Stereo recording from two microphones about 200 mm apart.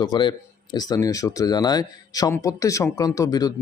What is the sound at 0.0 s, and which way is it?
Speech, 25° left (ahead or behind).